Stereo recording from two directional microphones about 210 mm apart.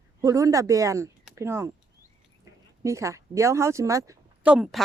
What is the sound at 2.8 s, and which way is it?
Speech, 15° right (ahead or behind).